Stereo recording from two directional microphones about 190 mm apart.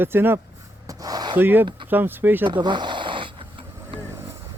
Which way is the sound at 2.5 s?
25° right (ahead or behind).